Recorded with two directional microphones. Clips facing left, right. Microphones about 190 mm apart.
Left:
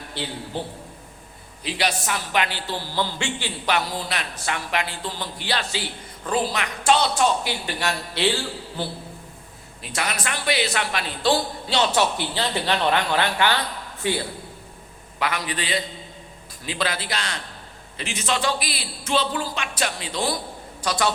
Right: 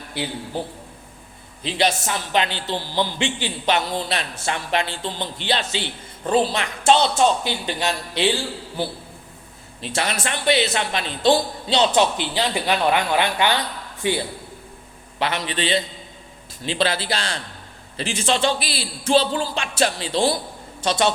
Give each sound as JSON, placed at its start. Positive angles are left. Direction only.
{"t": 1.6, "sound": "a man's voice", "side_deg": -25}
{"t": 9.8, "sound": "a man's voice", "side_deg": -30}
{"t": 15.2, "sound": "a man's voice", "side_deg": -25}